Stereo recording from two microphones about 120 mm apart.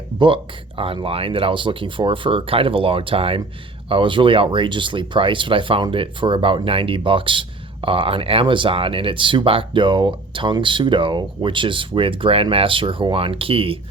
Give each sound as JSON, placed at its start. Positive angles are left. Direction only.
{"t": 0.9, "sound": "speech", "side_deg": -50}